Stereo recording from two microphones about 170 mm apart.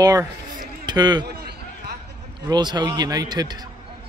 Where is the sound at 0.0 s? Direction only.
20° right (ahead or behind).